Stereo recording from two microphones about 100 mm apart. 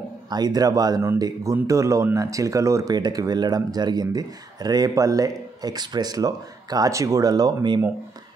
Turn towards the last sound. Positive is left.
turn(degrees=-45)  # may be behind; listen again after turning